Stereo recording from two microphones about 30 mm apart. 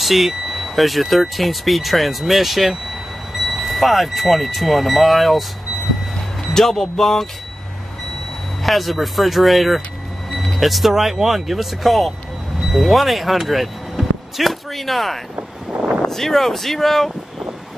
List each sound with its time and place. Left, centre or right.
0.0 s speech: centre
6.5 s speech: centre
8.6 s speech: centre
10.3 s vehicle: centre
10.6 s speech: centre
15.7 s a sound: right
16.1 s speech: centre